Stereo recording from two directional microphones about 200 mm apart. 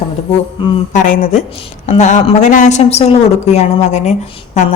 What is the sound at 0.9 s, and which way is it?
Speech, 40° left (ahead or behind).